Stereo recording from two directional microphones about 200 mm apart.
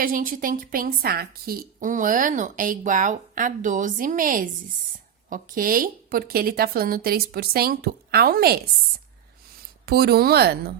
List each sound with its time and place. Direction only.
0.0 s a woman's voice: 45° right (ahead or behind)
9.8 s a woman's voice: 55° right (ahead or behind)